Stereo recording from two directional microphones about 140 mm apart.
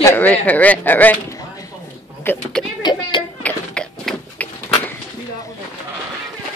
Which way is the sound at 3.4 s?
10° left (ahead or behind).